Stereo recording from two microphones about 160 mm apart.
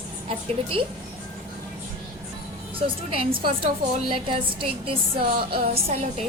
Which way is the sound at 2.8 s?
35° right (ahead or behind).